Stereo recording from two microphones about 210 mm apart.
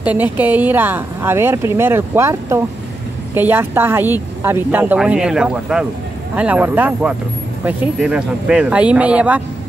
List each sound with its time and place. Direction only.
0.0 s speech: 10° right (ahead or behind)